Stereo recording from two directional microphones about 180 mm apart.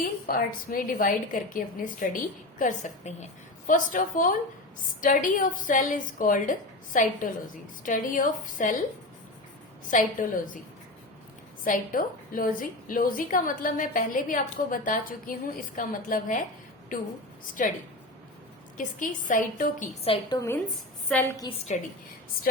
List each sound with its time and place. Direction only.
0.3 s a woman's voice: 55° left (ahead or behind)
9.9 s a woman's voice: 50° left (ahead or behind)
11.6 s a woman's voice: 50° left (ahead or behind)
18.8 s a woman's voice: 50° left (ahead or behind)
20.1 s a woman's voice: 20° left (ahead or behind)
21.7 s a woman's voice: 40° left (ahead or behind)